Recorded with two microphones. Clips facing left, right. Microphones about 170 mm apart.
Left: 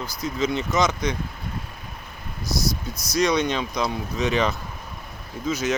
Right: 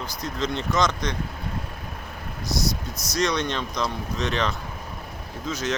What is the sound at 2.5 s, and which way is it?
Speech, 20° right (ahead or behind).